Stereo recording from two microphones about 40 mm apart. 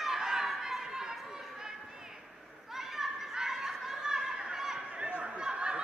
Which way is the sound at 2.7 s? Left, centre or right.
Centre.